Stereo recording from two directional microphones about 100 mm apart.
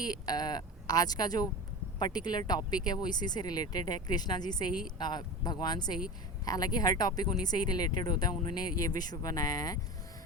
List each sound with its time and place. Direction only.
0.0 s speech: 40° left (ahead or behind)